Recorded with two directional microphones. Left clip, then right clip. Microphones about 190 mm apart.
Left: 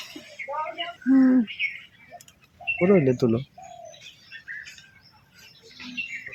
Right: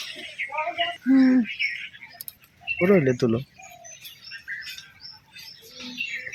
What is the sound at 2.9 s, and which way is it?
Speech, 5° left (ahead or behind).